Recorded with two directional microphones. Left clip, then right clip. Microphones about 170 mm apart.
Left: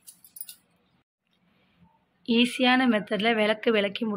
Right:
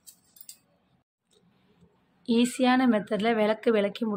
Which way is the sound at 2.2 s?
5° right (ahead or behind).